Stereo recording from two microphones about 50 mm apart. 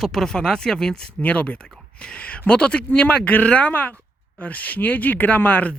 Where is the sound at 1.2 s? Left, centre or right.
Left.